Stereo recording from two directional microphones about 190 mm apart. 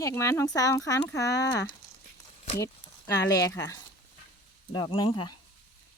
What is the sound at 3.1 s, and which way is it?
Speech, 20° left (ahead or behind).